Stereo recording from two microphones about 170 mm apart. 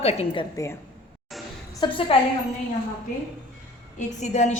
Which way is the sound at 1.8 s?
25° left (ahead or behind).